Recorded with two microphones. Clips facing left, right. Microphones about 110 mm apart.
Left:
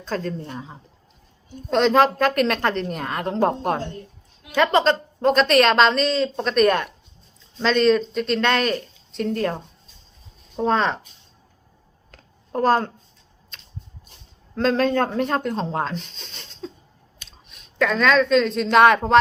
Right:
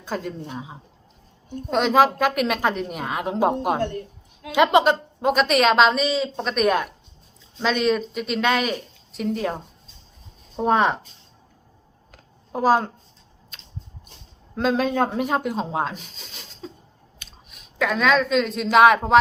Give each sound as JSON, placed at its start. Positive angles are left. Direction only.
{"t": 0.0, "sound": "speech", "side_deg": -10}
{"t": 3.8, "sound": "a woman's voice", "side_deg": -60}
{"t": 4.5, "sound": "a woman's voice", "side_deg": -15}
{"t": 10.7, "sound": "speech", "side_deg": -15}
{"t": 12.1, "sound": "a sound", "side_deg": -5}
{"t": 14.5, "sound": "a woman's voice", "side_deg": -5}